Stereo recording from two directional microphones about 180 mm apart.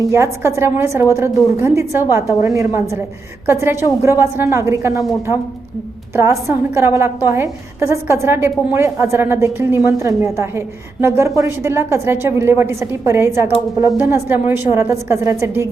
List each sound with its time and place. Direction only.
0.0 s a woman's voice: 15° right (ahead or behind)
6.1 s a woman's voice: 15° right (ahead or behind)